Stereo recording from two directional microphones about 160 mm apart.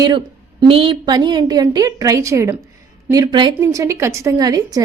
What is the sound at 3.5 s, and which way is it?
A woman's voice, 15° right (ahead or behind).